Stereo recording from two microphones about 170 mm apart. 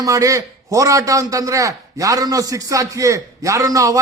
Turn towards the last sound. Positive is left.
turn(degrees=-20)  # may be behind; listen again after turning